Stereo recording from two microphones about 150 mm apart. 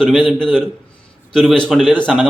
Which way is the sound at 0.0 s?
5° left (ahead or behind).